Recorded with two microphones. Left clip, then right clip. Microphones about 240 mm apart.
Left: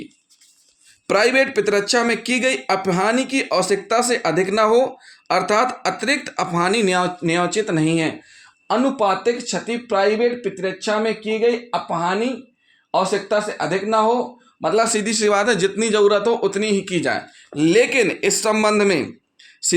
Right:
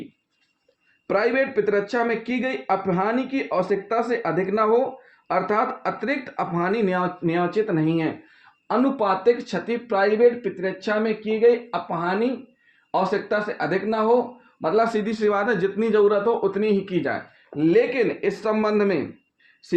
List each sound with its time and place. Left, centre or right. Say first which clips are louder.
1.0 s speech: left 5 dB; left